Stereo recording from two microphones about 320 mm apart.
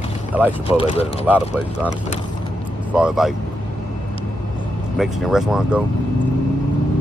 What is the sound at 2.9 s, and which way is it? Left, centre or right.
Speech, centre.